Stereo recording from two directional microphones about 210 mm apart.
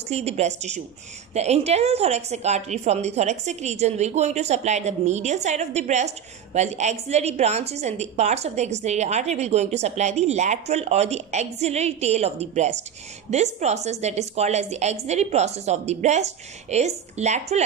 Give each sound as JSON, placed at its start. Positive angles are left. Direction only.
{"t": 0.1, "sound": "a woman's voice", "side_deg": -30}